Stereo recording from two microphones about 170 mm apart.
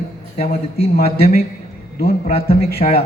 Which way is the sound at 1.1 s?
65° left (ahead or behind).